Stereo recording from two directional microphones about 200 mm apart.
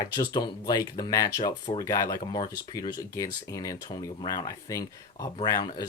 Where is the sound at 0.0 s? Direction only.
20° left (ahead or behind).